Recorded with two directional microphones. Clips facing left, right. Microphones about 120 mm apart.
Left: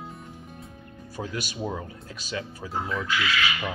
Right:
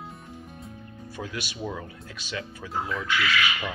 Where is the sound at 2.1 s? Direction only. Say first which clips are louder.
Left 2 dB; 40° left (ahead or behind).